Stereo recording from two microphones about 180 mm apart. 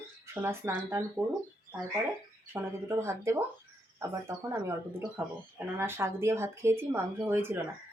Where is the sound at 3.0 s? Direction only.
15° right (ahead or behind).